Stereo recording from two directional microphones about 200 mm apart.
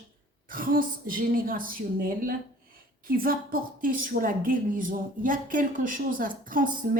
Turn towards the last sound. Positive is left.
turn(degrees=-45)  # may be behind; listen again after turning